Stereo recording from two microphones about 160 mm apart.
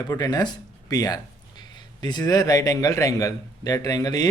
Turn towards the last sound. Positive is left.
turn(degrees=25)  # may be behind; listen again after turning